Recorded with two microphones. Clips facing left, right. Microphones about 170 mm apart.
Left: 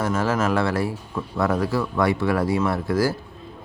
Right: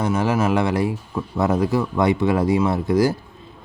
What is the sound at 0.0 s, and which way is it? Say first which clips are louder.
Speech: right 2 dB; 15° right (ahead or behind).